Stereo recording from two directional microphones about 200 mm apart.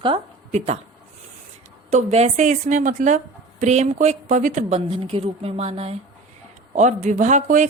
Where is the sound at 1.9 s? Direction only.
35° right (ahead or behind).